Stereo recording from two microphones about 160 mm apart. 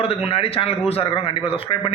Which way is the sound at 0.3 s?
35° left (ahead or behind).